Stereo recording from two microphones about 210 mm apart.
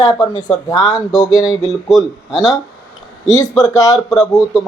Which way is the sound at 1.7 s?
Centre (ahead or behind).